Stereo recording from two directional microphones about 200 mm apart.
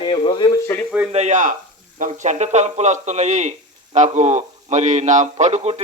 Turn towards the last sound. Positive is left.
turn(degrees=-35)  # may be behind; listen again after turning